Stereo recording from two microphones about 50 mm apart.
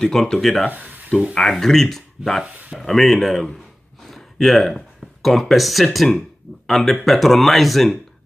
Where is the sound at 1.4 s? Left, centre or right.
Centre.